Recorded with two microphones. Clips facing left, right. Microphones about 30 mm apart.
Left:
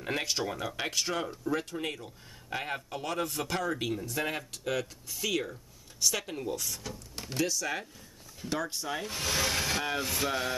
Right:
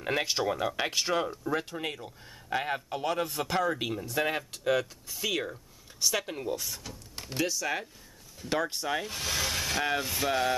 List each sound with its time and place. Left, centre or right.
0.0 s speech: centre
8.5 s speech: right
9.0 s speech: centre